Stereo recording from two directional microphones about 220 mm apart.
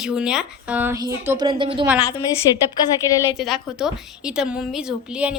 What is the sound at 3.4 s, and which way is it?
A woman's voice, centre (ahead or behind).